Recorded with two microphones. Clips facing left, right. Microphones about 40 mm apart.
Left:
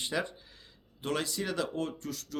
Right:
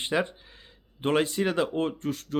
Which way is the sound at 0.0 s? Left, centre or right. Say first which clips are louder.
Right 6 dB; right.